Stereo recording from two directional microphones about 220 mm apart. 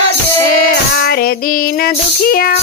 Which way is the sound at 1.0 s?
45° left (ahead or behind).